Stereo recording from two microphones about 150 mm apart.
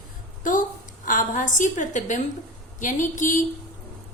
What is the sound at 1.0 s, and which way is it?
A woman's voice, 60° left (ahead or behind).